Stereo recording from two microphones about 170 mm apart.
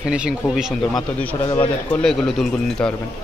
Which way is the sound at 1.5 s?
30° left (ahead or behind).